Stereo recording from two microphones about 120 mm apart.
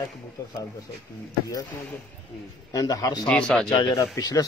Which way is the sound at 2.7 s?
30° left (ahead or behind).